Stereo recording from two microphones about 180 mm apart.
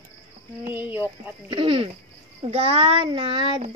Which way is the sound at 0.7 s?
10° right (ahead or behind).